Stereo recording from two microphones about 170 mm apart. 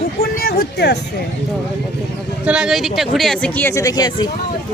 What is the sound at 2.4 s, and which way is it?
Speech, 5° right (ahead or behind).